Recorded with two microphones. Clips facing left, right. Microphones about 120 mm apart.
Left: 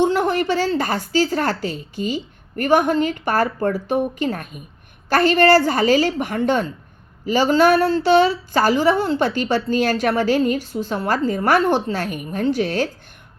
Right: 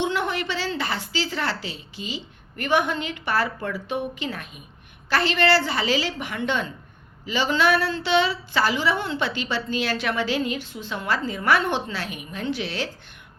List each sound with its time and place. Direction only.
0.0 s speech: 40° left (ahead or behind)